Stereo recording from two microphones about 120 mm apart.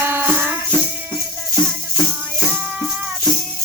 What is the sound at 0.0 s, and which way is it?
Music, 20° right (ahead or behind).